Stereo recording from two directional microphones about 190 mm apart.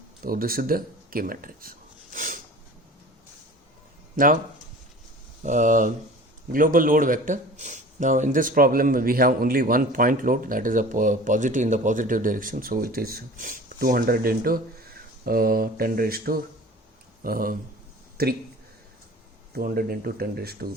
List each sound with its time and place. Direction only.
0.2 s a man's voice: 50° right (ahead or behind)
2.1 s a sound: 45° right (ahead or behind)
5.4 s a man's voice: 40° right (ahead or behind)
19.5 s speech: 55° right (ahead or behind)